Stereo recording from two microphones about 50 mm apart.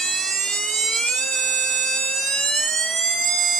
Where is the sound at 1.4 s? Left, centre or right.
Centre.